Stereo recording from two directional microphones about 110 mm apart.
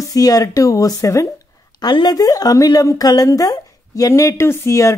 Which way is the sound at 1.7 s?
40° left (ahead or behind).